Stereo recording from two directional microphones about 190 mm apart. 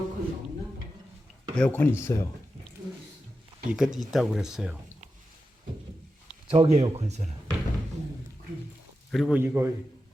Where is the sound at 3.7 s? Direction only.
5° right (ahead or behind).